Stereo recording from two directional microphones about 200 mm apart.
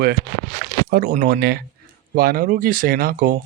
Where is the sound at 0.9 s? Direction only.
45° right (ahead or behind).